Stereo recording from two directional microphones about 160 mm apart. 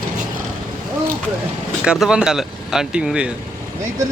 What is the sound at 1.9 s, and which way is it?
Speech, 5° right (ahead or behind).